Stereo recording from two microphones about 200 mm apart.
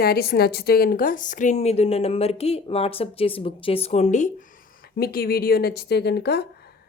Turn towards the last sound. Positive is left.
turn(degrees=55)  # may be behind; listen again after turning